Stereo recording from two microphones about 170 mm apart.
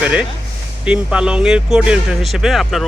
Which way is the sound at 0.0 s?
5° right (ahead or behind).